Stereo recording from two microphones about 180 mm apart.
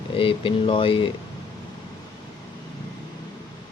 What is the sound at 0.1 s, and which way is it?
Speech, 30° left (ahead or behind).